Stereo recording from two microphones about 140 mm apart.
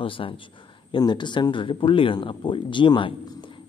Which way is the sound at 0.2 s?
40° left (ahead or behind).